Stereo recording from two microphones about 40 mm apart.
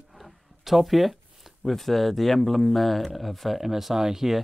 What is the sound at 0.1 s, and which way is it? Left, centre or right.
Speech, centre.